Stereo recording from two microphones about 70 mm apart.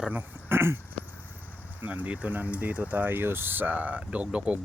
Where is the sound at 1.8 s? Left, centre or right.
Right.